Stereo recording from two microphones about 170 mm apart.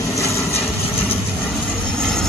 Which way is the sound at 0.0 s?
20° left (ahead or behind).